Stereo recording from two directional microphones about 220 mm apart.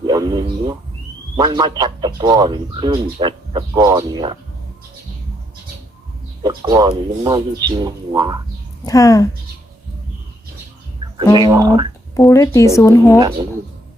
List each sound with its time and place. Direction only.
0.0 s a sound: 15° right (ahead or behind)
1.4 s speech: 20° right (ahead or behind)
6.4 s speech: 20° right (ahead or behind)
8.8 s a woman's voice: 15° left (ahead or behind)
11.3 s speech: 20° right (ahead or behind)
12.3 s a woman's voice: 15° left (ahead or behind)